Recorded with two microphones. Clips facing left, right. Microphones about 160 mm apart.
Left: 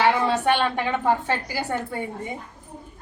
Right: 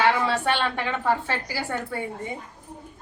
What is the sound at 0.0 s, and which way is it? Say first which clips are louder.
A woman's voice: left 2 dB; 15° left (ahead or behind).